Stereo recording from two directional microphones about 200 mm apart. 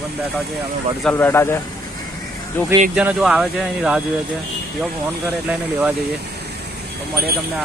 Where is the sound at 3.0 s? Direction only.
5° right (ahead or behind).